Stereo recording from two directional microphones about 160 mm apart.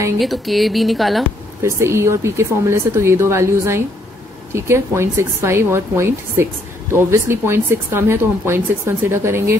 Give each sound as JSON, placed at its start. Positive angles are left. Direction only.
{"t": 0.2, "sound": "speech", "side_deg": 0}
{"t": 1.6, "sound": "a woman's voice", "side_deg": -15}